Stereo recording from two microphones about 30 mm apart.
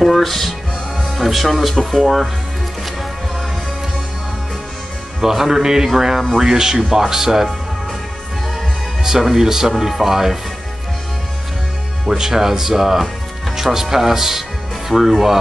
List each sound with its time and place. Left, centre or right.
0.0 s music: centre
1.1 s speech: centre
2.0 s speech: centre
5.2 s speech: centre
9.0 s speech: centre
12.1 s speech: centre